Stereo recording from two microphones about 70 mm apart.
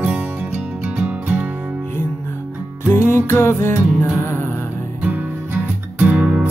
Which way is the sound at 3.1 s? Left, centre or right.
Left.